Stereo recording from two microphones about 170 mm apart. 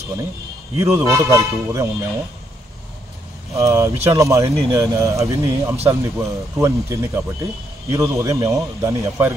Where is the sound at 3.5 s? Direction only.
15° right (ahead or behind).